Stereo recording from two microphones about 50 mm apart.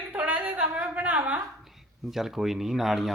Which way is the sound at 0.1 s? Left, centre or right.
Right.